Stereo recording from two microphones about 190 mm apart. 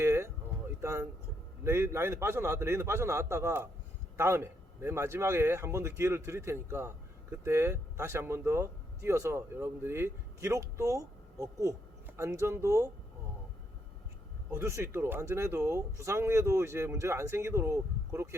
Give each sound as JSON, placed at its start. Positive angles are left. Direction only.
{"t": 0.0, "sound": "a sound", "side_deg": -15}
{"t": 1.6, "sound": "a man's voice", "side_deg": -15}
{"t": 14.5, "sound": "a man's voice", "side_deg": -15}